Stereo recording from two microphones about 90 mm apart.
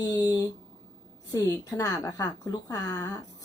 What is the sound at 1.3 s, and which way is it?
A woman's voice, 40° left (ahead or behind).